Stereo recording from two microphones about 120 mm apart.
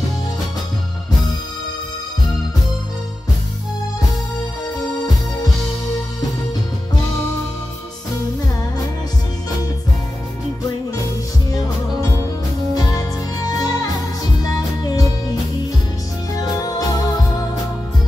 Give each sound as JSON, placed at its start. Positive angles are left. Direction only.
{"t": 12.7, "sound": "music", "side_deg": 35}
{"t": 16.3, "sound": "music", "side_deg": 30}